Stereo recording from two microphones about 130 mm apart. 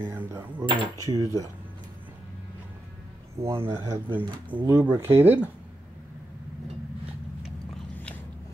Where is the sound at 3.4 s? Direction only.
15° right (ahead or behind).